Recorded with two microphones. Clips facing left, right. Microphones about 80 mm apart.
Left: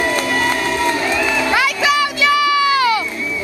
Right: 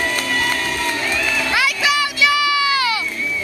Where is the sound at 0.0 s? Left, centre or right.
Left.